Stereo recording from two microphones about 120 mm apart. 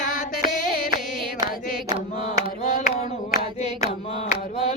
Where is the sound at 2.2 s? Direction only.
80° left.